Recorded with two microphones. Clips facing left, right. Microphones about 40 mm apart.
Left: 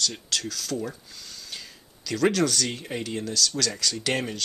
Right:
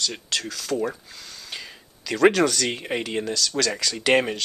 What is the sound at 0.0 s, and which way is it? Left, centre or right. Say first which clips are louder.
Speech: right 1 dB; right.